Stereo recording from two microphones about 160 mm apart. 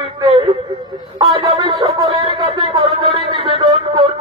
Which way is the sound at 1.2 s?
30° right (ahead or behind).